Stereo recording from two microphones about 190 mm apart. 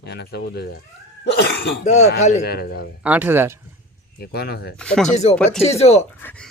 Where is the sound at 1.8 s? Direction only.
35° left (ahead or behind).